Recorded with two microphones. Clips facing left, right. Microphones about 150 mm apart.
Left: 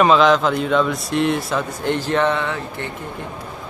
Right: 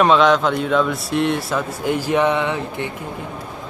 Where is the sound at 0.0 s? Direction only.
Centre (ahead or behind); by 2.9 s 15° right (ahead or behind).